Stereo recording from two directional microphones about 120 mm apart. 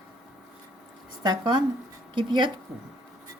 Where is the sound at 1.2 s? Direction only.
40° right (ahead or behind).